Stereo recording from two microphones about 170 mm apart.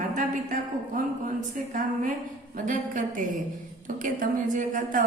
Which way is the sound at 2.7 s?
50° right (ahead or behind).